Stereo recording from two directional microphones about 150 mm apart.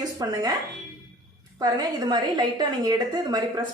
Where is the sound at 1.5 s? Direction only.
25° right (ahead or behind).